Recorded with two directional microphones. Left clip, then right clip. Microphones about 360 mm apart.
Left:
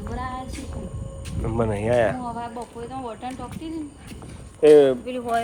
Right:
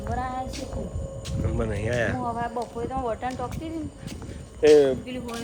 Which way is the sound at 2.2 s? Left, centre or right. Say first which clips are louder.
Right 3 dB; centre.